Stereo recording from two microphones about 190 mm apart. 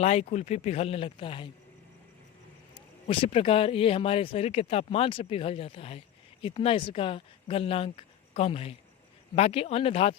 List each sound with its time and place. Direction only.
0.0 s speech: 35° left (ahead or behind)
2.7 s speech: 25° left (ahead or behind)